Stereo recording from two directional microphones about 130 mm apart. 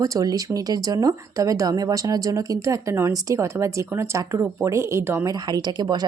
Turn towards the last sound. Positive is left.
turn(degrees=-35)  # may be behind; listen again after turning